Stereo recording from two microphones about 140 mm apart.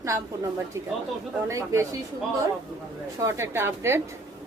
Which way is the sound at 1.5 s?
20° right (ahead or behind).